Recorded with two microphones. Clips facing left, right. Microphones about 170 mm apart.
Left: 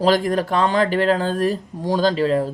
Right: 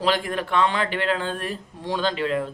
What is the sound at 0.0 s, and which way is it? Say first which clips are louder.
Speech: left 6 dB; 40° left (ahead or behind).